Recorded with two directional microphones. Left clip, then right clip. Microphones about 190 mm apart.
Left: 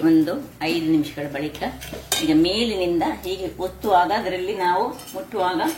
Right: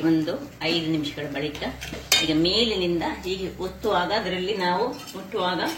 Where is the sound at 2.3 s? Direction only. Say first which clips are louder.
Left 2 dB; 55° left (ahead or behind).